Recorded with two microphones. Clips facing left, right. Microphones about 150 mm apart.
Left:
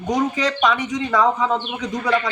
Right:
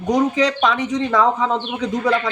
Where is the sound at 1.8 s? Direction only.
25° right (ahead or behind).